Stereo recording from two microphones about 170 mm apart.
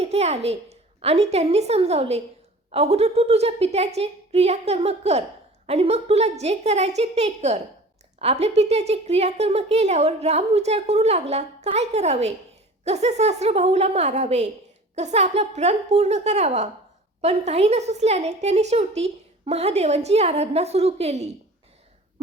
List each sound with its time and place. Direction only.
0.0 s a woman's voice: 40° right (ahead or behind)